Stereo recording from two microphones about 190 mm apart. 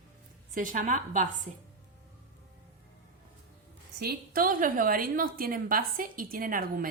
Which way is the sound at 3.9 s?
55° right (ahead or behind).